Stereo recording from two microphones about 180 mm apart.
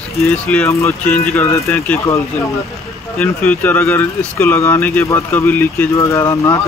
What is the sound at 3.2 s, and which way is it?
Speech, 10° left (ahead or behind).